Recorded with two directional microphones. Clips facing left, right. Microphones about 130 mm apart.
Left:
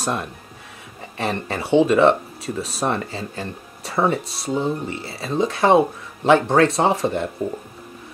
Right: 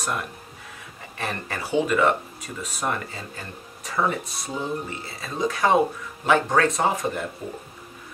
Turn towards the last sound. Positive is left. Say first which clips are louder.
# left 5 dB
turn(degrees=30)  # may be behind; listen again after turning